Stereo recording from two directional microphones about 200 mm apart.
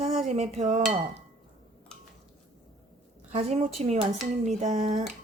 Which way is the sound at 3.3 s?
30° right (ahead or behind).